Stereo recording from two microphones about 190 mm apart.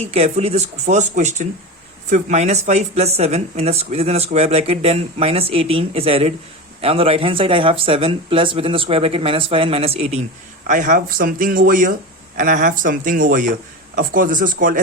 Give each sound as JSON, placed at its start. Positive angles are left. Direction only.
{"t": 0.0, "sound": "speech", "side_deg": -35}
{"t": 10.7, "sound": "speech", "side_deg": -45}